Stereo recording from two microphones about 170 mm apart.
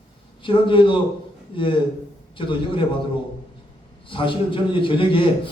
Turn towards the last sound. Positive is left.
turn(degrees=30)  # may be behind; listen again after turning